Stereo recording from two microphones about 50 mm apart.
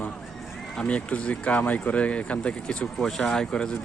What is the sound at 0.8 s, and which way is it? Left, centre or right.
Speech, left.